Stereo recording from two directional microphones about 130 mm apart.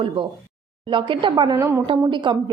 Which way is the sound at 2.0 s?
35° right (ahead or behind).